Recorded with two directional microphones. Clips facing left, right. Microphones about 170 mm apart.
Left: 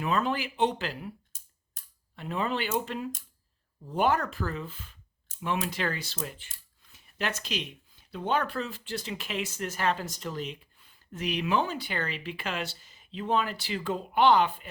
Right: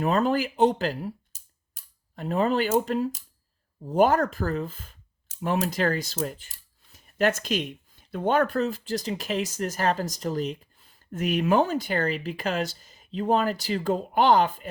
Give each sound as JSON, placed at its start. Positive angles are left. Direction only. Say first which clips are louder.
{"t": 0.0, "sound": "speech", "louder": "right 6 dB", "side_deg": -40}
{"t": 1.8, "sound": "a sound", "louder": "even", "side_deg": 0}
{"t": 2.1, "sound": "speech", "louder": "right 7 dB", "side_deg": -40}